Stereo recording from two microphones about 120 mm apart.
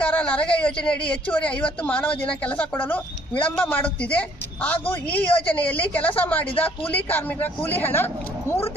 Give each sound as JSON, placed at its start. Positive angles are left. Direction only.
{"t": 0.0, "sound": "a woman's voice", "side_deg": 15}